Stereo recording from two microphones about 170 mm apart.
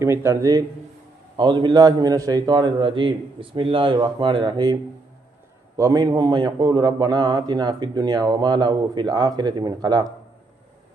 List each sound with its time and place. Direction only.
0.0 s a man's voice: 15° right (ahead or behind)